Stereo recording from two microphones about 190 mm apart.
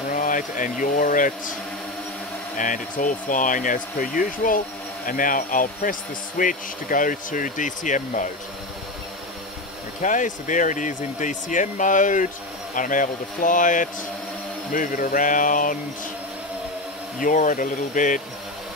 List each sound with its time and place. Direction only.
0.1 s speech: 45° left (ahead or behind)
2.5 s speech: 45° left (ahead or behind)
10.0 s speech: 40° left (ahead or behind)
17.2 s speech: 45° left (ahead or behind)